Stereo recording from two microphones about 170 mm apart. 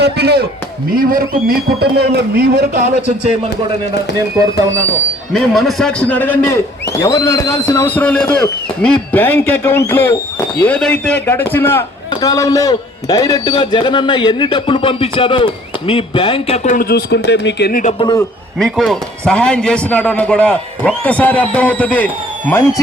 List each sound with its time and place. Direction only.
0.0 s speech: 70° right (ahead or behind)
0.9 s a man's voice: 60° right (ahead or behind)
5.3 s a man's voice: centre (ahead or behind); by 16.6 s 30° left (ahead or behind)
16.6 s speech: 55° left (ahead or behind)
18.0 s a man's voice: 20° left (ahead or behind)
18.6 s a man's voice: centre (ahead or behind)